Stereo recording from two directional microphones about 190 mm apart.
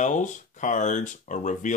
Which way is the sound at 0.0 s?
40° left (ahead or behind).